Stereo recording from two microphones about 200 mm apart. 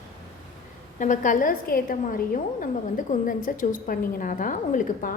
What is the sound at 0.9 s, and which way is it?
A woman's voice, 40° left (ahead or behind).